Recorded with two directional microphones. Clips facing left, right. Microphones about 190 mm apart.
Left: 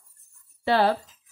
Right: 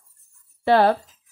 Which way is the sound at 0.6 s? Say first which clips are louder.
Right 5 dB; 55° right (ahead or behind).